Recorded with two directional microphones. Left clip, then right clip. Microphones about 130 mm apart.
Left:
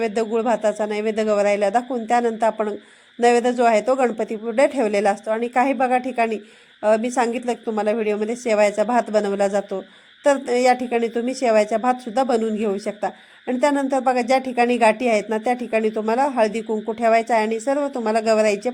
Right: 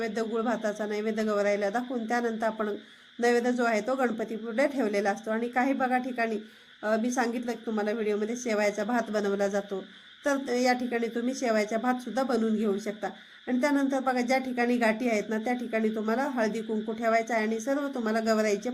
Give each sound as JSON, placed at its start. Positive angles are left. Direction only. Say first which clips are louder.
{"t": 0.0, "sound": "a woman's voice", "louder": "left 9 dB", "side_deg": 45}